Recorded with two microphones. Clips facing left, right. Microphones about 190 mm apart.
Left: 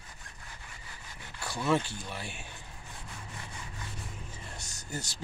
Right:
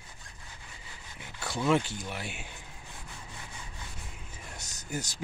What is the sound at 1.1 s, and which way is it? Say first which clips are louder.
Speech: right 3 dB; 20° right (ahead or behind).